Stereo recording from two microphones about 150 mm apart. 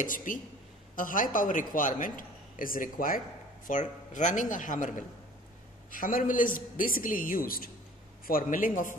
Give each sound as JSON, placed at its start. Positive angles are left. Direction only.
{"t": 0.0, "sound": "a man's voice", "side_deg": 60}
{"t": 3.6, "sound": "a man's voice", "side_deg": 55}